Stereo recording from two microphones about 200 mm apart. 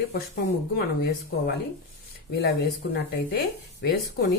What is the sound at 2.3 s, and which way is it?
Speech, 50° left (ahead or behind).